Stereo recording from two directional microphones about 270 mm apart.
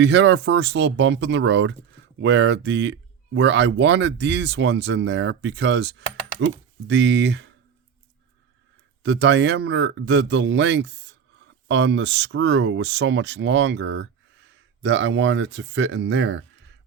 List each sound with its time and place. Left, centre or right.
0.0 s speech: right
9.0 s speech: right